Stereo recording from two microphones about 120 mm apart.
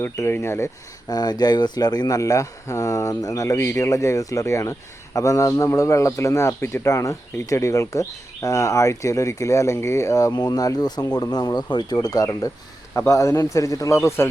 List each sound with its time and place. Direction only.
0.0 s speech: 20° left (ahead or behind)